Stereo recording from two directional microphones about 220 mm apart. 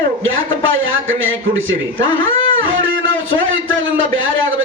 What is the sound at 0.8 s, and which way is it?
Speech, 65° right (ahead or behind).